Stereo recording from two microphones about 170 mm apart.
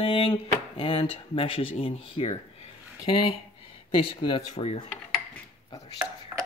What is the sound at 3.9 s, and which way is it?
Speech, 30° left (ahead or behind).